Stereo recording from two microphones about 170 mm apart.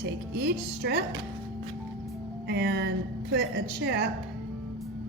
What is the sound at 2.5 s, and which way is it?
A woman's voice, 75° right (ahead or behind).